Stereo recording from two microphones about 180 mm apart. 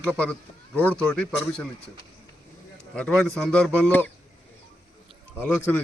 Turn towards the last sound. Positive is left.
turn(degrees=10)  # may be behind; listen again after turning